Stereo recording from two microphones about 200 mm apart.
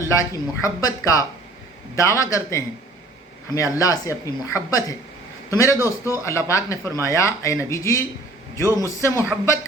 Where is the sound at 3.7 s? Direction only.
15° left (ahead or behind).